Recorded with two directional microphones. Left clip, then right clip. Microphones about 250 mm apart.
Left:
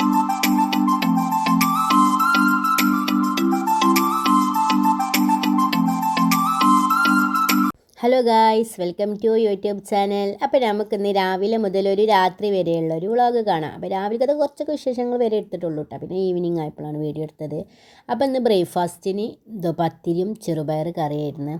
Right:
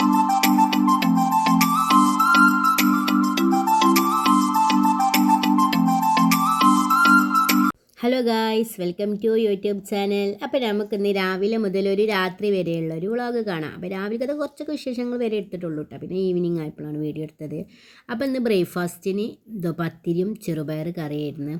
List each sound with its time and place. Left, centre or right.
0.0 s music: centre
8.0 s speech: centre